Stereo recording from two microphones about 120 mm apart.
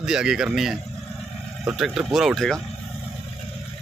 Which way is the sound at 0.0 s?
5° right (ahead or behind).